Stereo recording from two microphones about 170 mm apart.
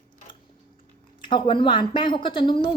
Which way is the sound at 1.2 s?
30° left (ahead or behind).